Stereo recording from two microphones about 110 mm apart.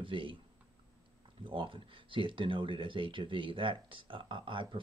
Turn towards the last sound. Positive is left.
turn(degrees=-50)  # may be behind; listen again after turning